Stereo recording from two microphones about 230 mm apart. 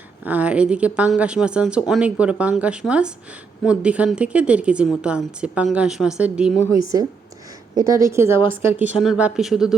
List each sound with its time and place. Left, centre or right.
0.3 s speech: centre
7.8 s a woman's voice: centre